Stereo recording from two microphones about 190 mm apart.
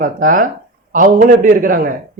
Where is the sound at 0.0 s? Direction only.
45° right (ahead or behind).